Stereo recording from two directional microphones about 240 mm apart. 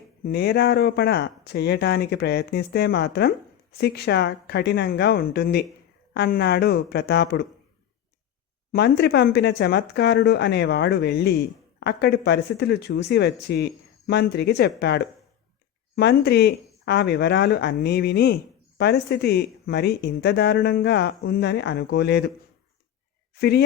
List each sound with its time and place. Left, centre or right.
0.3 s speech: left
8.7 s speech: left
23.3 s speech: left